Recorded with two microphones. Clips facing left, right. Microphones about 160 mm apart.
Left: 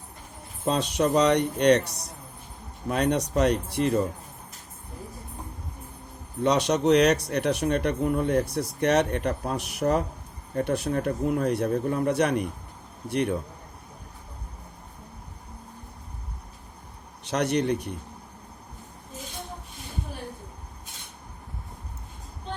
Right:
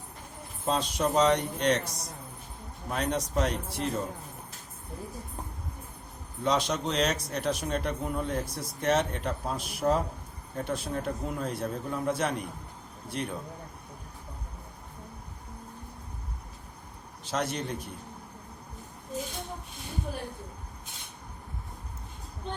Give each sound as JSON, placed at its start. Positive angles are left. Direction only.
{"t": 0.6, "sound": "speech", "side_deg": 70}
{"t": 6.4, "sound": "speech", "side_deg": 65}
{"t": 17.2, "sound": "speech", "side_deg": 70}